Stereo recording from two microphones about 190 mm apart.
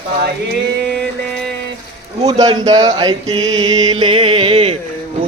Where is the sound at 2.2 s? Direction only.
20° right (ahead or behind).